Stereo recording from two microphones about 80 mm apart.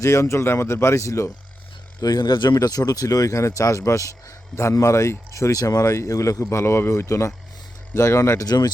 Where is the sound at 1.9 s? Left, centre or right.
Left.